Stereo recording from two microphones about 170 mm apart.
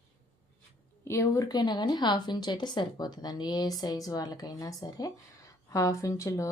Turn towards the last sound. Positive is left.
turn(degrees=20)  # may be behind; listen again after turning